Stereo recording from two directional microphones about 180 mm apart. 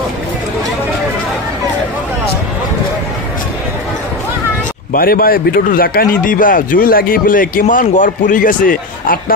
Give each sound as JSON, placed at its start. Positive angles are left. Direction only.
{"t": 4.9, "sound": "speech", "side_deg": 55}